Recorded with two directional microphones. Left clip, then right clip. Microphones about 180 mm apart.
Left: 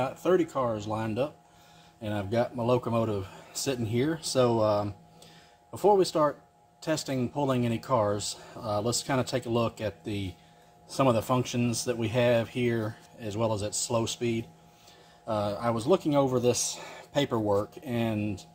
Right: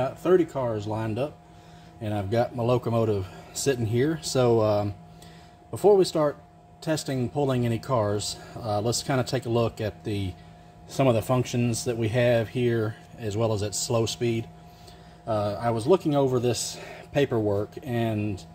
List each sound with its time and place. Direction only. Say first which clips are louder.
0.0 s speech: right 4 dB; 20° left (ahead or behind); by 14.4 s 5° right (ahead or behind)
15.2 s speech: right 3 dB; 15° left (ahead or behind)